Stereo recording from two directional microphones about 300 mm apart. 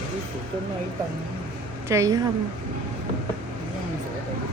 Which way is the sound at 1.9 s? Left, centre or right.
Centre.